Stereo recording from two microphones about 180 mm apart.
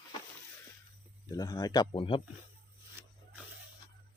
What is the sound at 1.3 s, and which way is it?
Speech, 20° left (ahead or behind).